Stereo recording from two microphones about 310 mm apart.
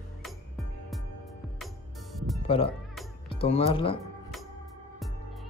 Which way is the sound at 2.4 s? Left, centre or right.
Centre.